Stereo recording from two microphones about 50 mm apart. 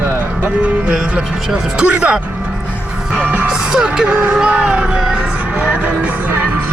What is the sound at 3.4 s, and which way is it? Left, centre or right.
Speech, centre.